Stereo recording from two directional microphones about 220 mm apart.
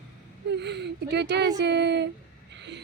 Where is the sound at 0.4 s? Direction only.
50° right (ahead or behind).